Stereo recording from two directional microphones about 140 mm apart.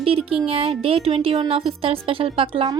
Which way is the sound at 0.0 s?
45° right (ahead or behind).